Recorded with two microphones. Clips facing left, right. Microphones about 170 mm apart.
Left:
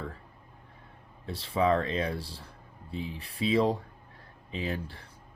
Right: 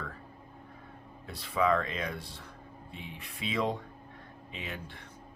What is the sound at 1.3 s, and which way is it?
Speech, 30° left (ahead or behind).